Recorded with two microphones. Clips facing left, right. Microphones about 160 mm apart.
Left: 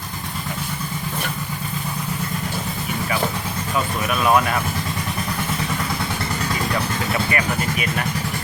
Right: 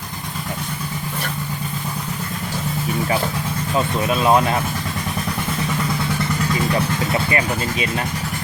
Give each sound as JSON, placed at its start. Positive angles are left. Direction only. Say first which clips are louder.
{"t": 4.0, "sound": "speech", "louder": "right 2 dB", "side_deg": -25}
{"t": 7.3, "sound": "speech", "louder": "right 1 dB", "side_deg": -25}